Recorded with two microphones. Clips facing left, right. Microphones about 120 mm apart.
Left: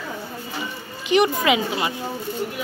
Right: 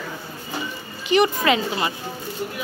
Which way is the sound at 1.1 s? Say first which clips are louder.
Even; 15° left (ahead or behind).